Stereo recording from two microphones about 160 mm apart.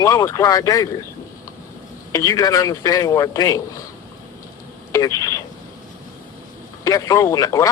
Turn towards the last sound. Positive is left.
turn(degrees=20)  # may be behind; listen again after turning